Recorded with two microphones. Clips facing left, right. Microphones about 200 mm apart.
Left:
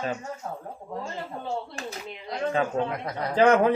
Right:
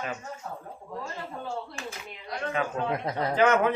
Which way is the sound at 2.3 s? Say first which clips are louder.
Left 4 dB; 30° left (ahead or behind).